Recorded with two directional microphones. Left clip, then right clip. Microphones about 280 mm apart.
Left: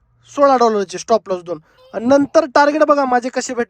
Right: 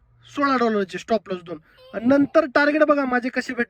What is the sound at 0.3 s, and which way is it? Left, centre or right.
Speech, centre.